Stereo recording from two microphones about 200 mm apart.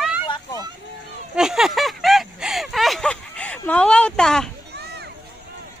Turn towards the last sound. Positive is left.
turn(degrees=-55)  # may be behind; listen again after turning